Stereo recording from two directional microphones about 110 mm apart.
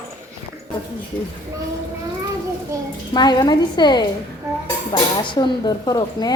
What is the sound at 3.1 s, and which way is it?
Speech, 40° left (ahead or behind).